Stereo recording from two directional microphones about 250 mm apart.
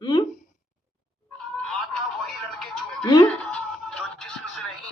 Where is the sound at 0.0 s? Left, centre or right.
Centre.